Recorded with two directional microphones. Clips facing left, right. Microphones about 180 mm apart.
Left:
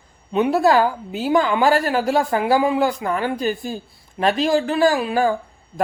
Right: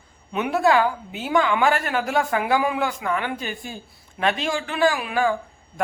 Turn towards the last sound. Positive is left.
turn(degrees=35)  # may be behind; listen again after turning